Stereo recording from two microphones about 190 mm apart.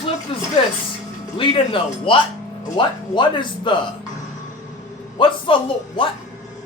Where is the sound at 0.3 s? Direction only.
30° left (ahead or behind).